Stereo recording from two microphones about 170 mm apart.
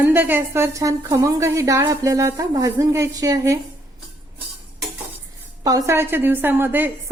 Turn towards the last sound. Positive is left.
turn(degrees=-10)  # may be behind; listen again after turning